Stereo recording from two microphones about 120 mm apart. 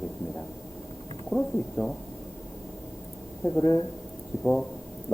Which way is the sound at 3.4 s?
25° left (ahead or behind).